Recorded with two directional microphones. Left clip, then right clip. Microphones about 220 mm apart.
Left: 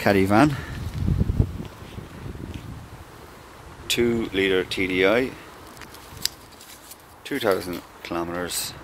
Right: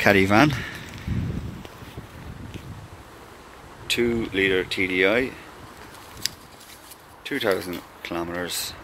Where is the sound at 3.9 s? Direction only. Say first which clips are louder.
Left 1 dB; 10° left (ahead or behind).